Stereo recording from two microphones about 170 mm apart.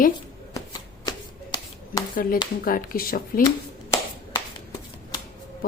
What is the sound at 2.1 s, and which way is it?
Speech, 55° left (ahead or behind).